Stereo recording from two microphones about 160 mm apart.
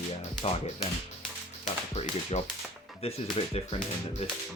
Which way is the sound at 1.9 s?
40° left (ahead or behind).